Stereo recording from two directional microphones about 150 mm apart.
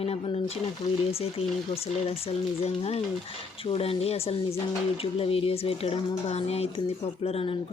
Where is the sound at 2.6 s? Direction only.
40° left (ahead or behind).